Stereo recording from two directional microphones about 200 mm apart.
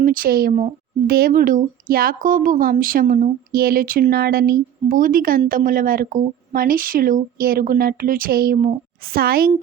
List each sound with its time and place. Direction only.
0.0 s a woman's voice: 45° right (ahead or behind)